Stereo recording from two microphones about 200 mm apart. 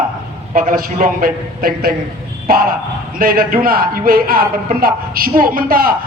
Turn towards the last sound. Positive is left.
turn(degrees=-45)  # may be behind; listen again after turning